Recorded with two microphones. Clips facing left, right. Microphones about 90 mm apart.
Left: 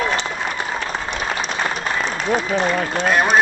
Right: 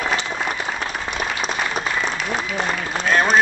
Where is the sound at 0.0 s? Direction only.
40° left (ahead or behind).